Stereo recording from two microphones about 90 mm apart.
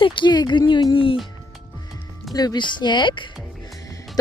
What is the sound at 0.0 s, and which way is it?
Speech, 65° left (ahead or behind).